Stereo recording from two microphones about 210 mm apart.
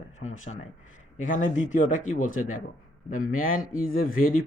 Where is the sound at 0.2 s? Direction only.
35° left (ahead or behind).